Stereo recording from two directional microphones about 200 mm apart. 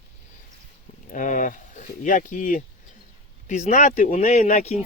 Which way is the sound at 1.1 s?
40° left (ahead or behind).